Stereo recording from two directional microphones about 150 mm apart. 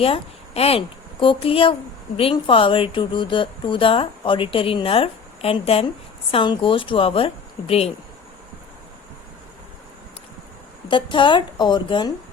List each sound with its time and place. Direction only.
0.0 s a woman's voice: 40° left (ahead or behind)
10.8 s speech: 35° left (ahead or behind)